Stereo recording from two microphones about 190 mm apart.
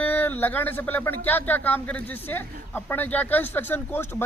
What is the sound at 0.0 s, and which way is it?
Speech, 10° left (ahead or behind).